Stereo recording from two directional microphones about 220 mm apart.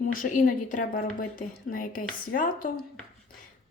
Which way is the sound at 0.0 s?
40° left (ahead or behind).